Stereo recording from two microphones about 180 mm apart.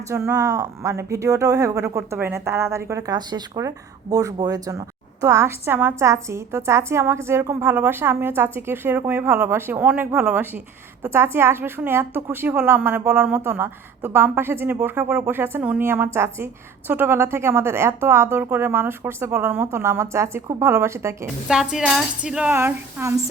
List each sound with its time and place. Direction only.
0.1 s a woman's voice: 15° right (ahead or behind)
21.4 s speech: 5° right (ahead or behind)